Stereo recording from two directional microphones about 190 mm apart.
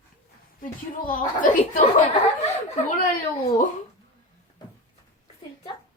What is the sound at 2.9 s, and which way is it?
Speech, 50° left (ahead or behind).